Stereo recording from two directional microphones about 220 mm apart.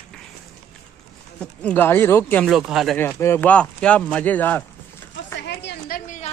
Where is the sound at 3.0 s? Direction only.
10° left (ahead or behind).